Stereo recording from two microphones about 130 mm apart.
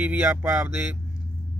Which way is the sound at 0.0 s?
10° right (ahead or behind).